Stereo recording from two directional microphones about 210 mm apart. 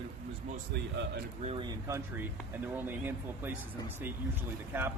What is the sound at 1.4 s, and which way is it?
Speech, 25° right (ahead or behind).